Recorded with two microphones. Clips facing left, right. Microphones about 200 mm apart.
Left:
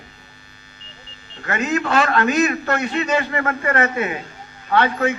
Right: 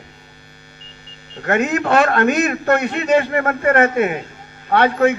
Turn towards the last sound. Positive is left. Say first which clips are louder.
# right 4 dB
turn(degrees=-55)  # may be behind; listen again after turning